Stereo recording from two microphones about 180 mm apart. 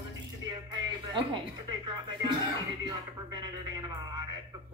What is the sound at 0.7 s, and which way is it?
Music, 25° right (ahead or behind).